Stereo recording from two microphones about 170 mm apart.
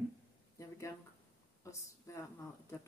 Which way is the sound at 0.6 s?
20° left (ahead or behind).